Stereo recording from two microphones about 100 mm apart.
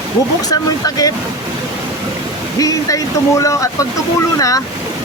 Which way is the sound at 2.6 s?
35° left (ahead or behind).